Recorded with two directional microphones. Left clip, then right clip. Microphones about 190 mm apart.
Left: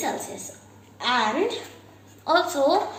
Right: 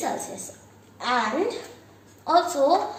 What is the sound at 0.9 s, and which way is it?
Speech, 20° right (ahead or behind).